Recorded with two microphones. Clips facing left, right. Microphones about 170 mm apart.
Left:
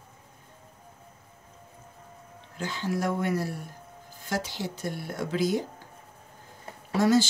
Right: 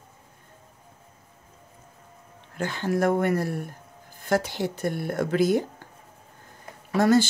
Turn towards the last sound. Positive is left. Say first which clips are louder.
# right 2 dB
turn(degrees=-60)  # may be behind; listen again after turning